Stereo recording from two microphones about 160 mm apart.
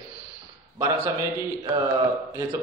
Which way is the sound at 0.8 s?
20° right (ahead or behind).